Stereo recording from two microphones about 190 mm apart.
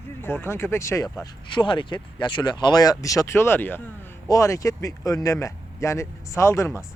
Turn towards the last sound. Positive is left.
turn(degrees=15)  # may be behind; listen again after turning